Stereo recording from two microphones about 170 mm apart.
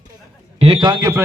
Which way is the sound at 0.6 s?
30° right (ahead or behind).